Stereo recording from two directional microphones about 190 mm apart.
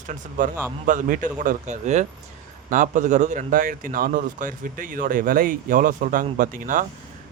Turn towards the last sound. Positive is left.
turn(degrees=-45)  # may be behind; listen again after turning